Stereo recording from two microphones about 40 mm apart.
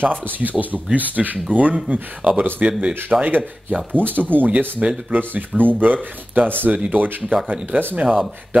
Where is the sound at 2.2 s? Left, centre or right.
Right.